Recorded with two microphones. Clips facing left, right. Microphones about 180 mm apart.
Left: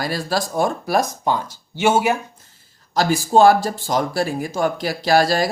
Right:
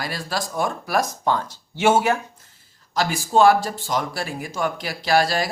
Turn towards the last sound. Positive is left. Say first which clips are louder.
# left 3 dB
turn(degrees=40)  # may be behind; listen again after turning